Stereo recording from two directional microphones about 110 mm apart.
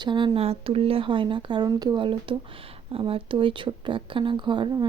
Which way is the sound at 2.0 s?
50° right (ahead or behind).